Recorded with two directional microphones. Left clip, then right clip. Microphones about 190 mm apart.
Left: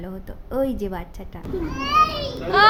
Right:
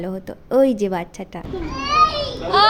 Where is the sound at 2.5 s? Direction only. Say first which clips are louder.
Even; 20° left (ahead or behind).